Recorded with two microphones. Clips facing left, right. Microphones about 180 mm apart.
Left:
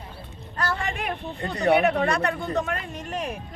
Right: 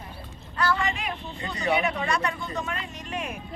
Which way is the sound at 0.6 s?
55° left (ahead or behind).